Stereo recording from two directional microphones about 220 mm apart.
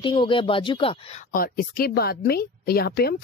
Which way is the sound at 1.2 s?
40° left (ahead or behind).